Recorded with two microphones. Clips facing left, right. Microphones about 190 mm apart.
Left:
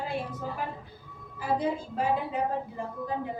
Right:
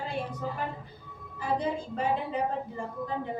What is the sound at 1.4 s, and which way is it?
A woman's voice, 5° left (ahead or behind).